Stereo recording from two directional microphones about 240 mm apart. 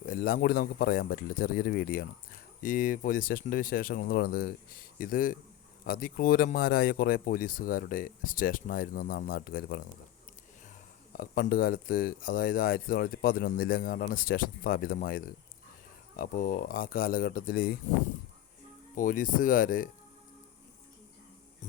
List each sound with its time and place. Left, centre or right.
0.0 s speech: left
11.2 s speech: left
18.9 s speech: left